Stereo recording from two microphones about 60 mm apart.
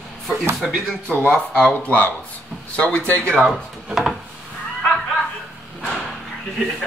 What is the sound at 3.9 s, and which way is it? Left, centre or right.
Wood, centre.